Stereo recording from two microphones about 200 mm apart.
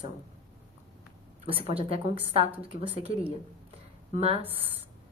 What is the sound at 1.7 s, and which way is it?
Speech, 30° right (ahead or behind).